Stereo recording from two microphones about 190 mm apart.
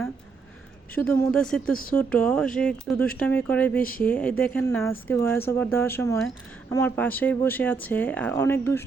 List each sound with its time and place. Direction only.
1.3 s speech: 5° left (ahead or behind)
3.8 s speech: 50° left (ahead or behind)
4.0 s speech: 10° left (ahead or behind)